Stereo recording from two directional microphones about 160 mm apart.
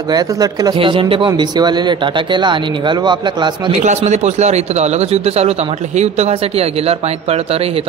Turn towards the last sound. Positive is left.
turn(degrees=-40)  # may be behind; listen again after turning